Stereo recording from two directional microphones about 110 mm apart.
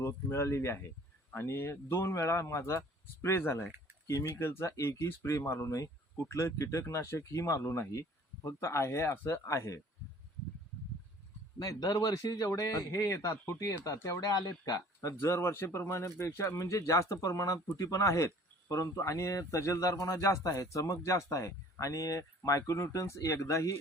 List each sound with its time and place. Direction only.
0.0 s speech: 25° left (ahead or behind)
11.6 s speech: 35° left (ahead or behind)
15.2 s speech: 20° left (ahead or behind)